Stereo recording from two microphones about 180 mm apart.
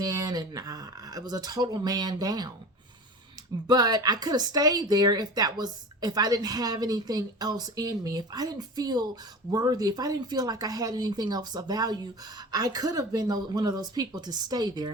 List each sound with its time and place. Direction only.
0.0 s speech: 20° right (ahead or behind)
3.7 s speech: 20° right (ahead or behind)